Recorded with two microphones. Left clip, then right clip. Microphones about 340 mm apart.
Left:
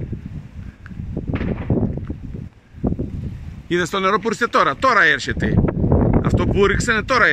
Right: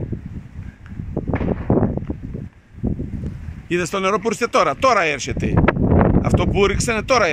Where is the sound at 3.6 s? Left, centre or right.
Centre.